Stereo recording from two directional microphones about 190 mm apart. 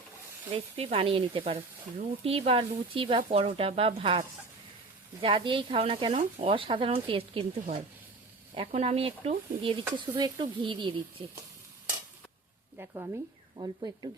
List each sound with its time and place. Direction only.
0.5 s speech: 30° right (ahead or behind)
12.7 s a woman's voice: 15° right (ahead or behind)